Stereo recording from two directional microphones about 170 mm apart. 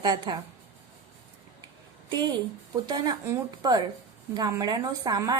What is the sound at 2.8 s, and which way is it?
A woman's voice, 25° right (ahead or behind).